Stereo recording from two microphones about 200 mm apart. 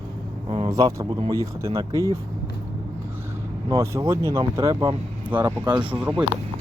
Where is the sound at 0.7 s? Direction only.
20° right (ahead or behind).